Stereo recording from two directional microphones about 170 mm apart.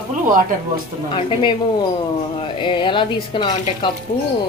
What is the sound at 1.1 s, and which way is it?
A woman's voice, 30° left (ahead or behind).